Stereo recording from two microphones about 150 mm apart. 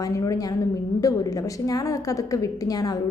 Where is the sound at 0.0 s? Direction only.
25° left (ahead or behind).